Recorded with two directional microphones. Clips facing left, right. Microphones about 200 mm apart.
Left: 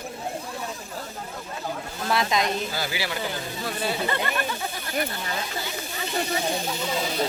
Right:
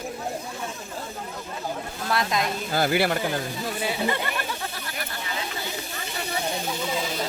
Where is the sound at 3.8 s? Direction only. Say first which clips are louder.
Even; 15° right (ahead or behind).